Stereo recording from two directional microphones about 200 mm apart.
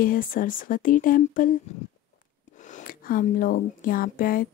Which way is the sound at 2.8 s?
45° left (ahead or behind).